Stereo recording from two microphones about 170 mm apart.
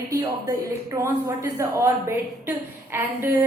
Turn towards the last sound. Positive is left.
turn(degrees=-15)  # may be behind; listen again after turning